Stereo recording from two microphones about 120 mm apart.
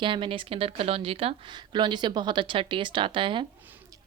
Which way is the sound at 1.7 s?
35° right (ahead or behind).